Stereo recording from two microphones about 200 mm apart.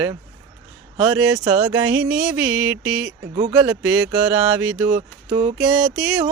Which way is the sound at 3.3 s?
25° right (ahead or behind).